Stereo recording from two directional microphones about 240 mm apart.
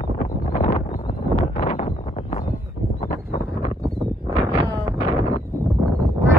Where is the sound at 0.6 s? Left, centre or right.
Left.